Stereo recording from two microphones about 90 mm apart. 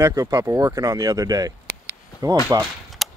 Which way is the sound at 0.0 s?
35° right (ahead or behind).